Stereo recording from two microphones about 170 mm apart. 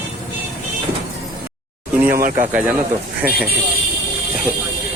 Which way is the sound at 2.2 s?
50° right (ahead or behind).